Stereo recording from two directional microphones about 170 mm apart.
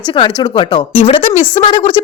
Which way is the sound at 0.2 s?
30° left (ahead or behind).